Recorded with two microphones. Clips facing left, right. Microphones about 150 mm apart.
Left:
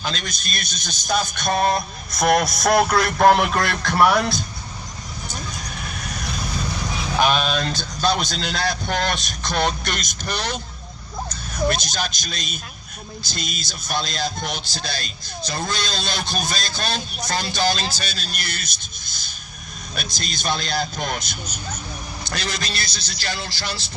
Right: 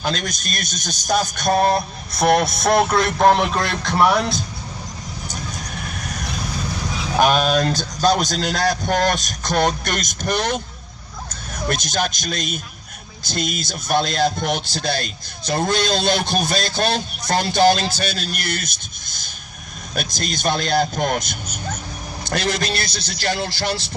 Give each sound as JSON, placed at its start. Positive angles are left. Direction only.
{"t": 0.0, "sound": "a man's voice", "side_deg": -50}
{"t": 6.0, "sound": "vehicle", "side_deg": -45}
{"t": 7.2, "sound": "a man's voice", "side_deg": -45}